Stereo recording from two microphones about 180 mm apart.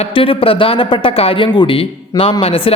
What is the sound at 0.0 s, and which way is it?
Speech, 30° left (ahead or behind).